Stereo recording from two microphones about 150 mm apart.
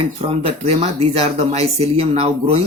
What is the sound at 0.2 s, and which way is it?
Speech, 40° right (ahead or behind).